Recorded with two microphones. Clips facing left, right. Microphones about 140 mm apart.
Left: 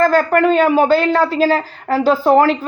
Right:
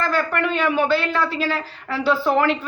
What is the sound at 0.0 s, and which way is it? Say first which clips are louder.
Speech: left 9 dB; 40° left (ahead or behind).